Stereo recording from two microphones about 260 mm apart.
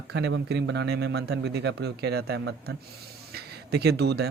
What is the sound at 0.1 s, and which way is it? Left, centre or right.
Speech, right.